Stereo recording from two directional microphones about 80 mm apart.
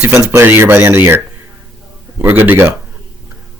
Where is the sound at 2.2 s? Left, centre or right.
Right.